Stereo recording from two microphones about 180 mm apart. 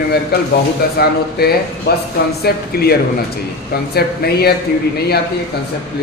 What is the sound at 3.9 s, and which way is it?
Speech, 60° left (ahead or behind).